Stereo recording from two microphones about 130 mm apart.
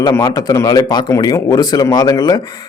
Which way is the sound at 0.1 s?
25° left (ahead or behind).